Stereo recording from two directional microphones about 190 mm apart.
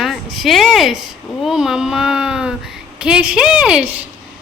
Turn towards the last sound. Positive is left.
turn(degrees=-5)  # may be behind; listen again after turning